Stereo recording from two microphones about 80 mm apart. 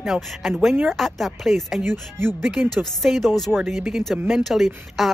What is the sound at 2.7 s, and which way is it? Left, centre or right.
Speech, centre.